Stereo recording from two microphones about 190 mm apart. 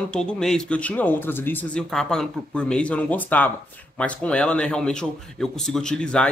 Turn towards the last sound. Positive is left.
turn(degrees=5)  # may be behind; listen again after turning